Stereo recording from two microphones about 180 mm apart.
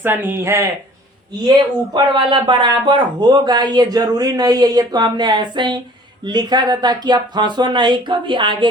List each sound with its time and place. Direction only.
0.0 s speech: 10° right (ahead or behind); by 8.5 s 25° right (ahead or behind)